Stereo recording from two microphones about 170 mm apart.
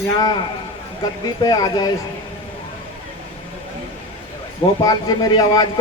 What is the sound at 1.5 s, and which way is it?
Speech, 20° left (ahead or behind).